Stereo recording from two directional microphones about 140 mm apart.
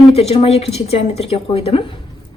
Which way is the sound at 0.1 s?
45° left (ahead or behind).